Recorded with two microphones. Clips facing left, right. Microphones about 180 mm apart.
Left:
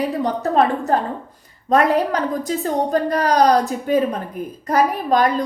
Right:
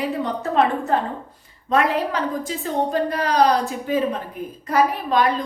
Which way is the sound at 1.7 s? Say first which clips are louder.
Left 4 dB; 40° left (ahead or behind).